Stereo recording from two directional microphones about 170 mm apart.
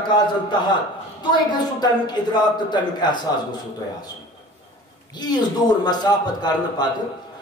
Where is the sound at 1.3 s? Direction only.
25° left (ahead or behind).